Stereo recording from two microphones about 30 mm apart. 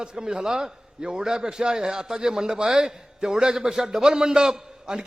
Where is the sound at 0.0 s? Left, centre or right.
Right.